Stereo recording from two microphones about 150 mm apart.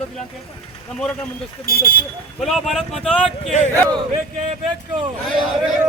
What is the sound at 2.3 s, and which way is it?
Speech, centre (ahead or behind).